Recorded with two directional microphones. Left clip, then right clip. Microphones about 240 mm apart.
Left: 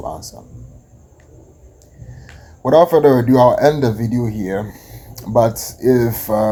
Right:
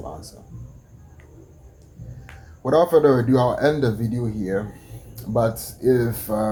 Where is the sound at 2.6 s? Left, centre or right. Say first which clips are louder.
Left 5 dB; left.